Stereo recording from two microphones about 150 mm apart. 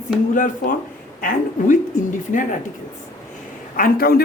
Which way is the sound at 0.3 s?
65° left (ahead or behind).